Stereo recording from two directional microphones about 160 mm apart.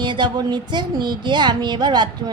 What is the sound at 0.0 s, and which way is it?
Speech, 30° right (ahead or behind).